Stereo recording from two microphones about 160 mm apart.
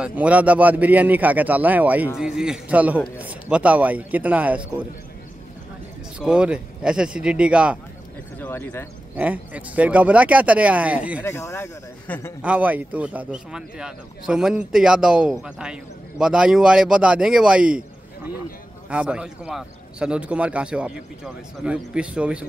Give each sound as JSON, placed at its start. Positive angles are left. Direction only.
{"t": 0.0, "sound": "a man's voice", "side_deg": -10}
{"t": 6.1, "sound": "a man's voice", "side_deg": -5}
{"t": 8.4, "sound": "speech", "side_deg": 15}
{"t": 9.1, "sound": "a man's voice", "side_deg": -10}
{"t": 11.2, "sound": "speech", "side_deg": 15}
{"t": 12.4, "sound": "a man's voice", "side_deg": -10}